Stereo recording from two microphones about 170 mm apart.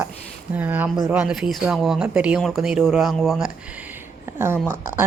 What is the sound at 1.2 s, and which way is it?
Speech, 5° right (ahead or behind).